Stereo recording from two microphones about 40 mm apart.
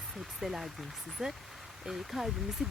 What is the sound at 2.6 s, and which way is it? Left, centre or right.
Speech, centre.